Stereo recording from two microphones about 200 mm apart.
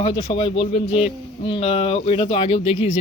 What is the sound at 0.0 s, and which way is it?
Speech, 25° left (ahead or behind).